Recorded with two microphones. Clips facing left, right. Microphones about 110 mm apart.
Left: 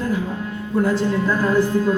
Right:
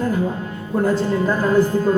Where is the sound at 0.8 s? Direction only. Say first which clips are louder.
Right 1 dB; 45° right (ahead or behind).